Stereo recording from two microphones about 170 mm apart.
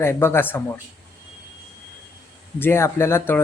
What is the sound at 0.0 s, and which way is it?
Speech, 15° left (ahead or behind).